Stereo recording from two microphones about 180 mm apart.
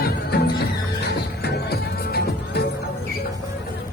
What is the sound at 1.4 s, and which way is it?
Music, 65° left (ahead or behind).